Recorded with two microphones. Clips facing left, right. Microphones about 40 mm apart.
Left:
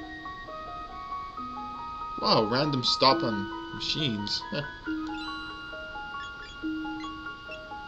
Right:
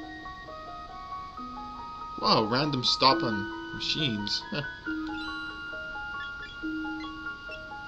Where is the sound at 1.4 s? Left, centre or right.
Left.